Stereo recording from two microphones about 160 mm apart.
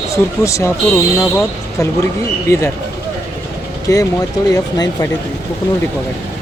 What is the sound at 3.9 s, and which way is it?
Speech, 20° left (ahead or behind).